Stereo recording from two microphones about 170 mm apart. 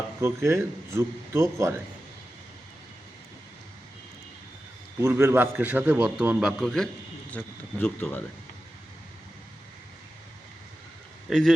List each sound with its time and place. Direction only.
0.2 s a man's voice: 15° right (ahead or behind)
4.9 s a man's voice: 15° right (ahead or behind); by 8.2 s 10° left (ahead or behind)
11.3 s speech: centre (ahead or behind)